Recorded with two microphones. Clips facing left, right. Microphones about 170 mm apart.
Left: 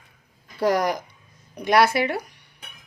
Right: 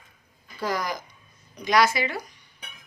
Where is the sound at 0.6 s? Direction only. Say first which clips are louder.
Left 7 dB; 65° left (ahead or behind).